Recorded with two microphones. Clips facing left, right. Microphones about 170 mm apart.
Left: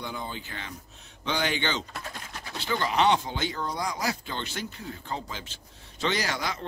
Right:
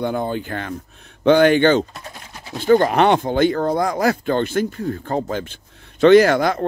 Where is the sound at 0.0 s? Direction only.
55° right (ahead or behind).